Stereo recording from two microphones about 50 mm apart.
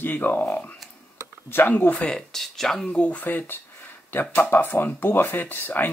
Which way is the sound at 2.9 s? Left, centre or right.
Left.